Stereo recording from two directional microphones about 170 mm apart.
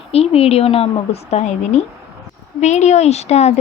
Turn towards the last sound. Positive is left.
turn(degrees=40)  # may be behind; listen again after turning